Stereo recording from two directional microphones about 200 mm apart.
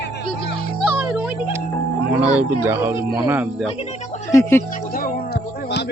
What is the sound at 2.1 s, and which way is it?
Speech, 10° right (ahead or behind).